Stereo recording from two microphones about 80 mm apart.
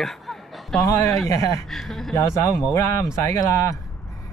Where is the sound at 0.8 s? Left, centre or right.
Left.